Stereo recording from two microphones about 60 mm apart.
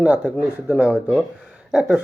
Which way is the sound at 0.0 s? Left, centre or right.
Right.